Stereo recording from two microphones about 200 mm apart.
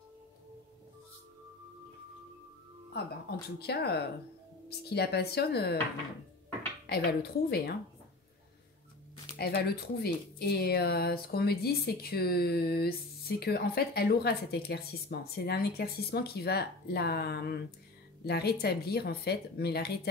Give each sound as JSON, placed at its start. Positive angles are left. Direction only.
{"t": 2.9, "sound": "speech", "side_deg": 55}
{"t": 6.9, "sound": "speech", "side_deg": 50}
{"t": 9.6, "sound": "speech", "side_deg": 50}